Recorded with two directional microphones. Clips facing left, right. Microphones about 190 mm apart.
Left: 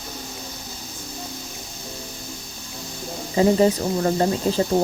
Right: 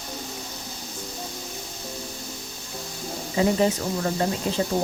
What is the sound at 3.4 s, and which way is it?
Speech, 35° left (ahead or behind).